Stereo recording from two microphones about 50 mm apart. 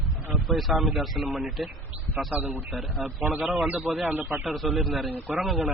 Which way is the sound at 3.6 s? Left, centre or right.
Right.